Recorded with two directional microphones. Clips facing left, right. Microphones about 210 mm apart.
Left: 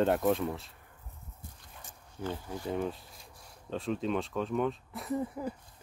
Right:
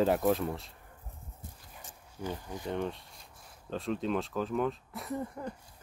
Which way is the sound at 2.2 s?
Centre (ahead or behind).